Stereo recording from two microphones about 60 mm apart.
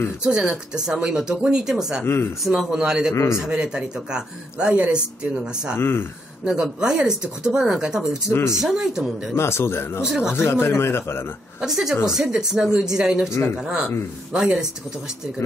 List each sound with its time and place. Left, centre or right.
0.2 s speech: centre
2.0 s a man's voice: left
2.4 s speech: centre
5.8 s a man's voice: left
6.4 s speech: centre
8.3 s a man's voice: left
8.5 s speech: centre
9.3 s a man's voice: left
10.0 s speech: centre
10.3 s a man's voice: left
11.6 s speech: centre